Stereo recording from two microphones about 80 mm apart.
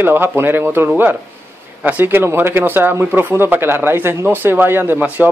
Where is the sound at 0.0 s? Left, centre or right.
Right.